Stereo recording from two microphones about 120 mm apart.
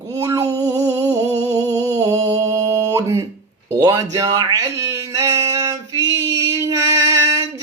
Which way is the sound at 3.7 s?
35° right (ahead or behind).